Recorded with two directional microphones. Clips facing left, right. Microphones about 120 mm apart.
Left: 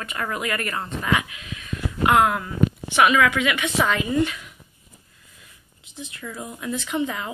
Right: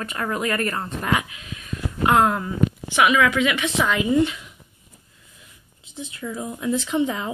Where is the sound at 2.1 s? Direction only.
25° right (ahead or behind).